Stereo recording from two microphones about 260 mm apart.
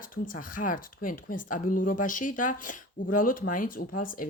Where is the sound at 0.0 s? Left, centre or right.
Left.